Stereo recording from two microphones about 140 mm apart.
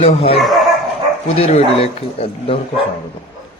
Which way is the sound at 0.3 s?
Centre (ahead or behind).